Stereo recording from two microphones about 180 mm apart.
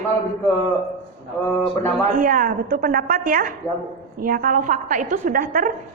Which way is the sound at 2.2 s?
50° right (ahead or behind).